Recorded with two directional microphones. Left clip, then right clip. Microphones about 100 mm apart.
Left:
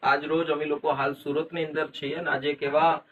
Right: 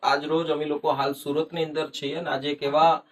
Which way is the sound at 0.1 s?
30° right (ahead or behind).